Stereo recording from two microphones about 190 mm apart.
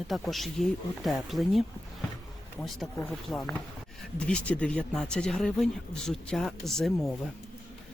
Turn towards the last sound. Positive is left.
turn(degrees=0)  # may be behind; listen again after turning